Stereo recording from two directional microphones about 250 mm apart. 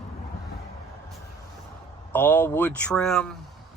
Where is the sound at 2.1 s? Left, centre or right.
Centre.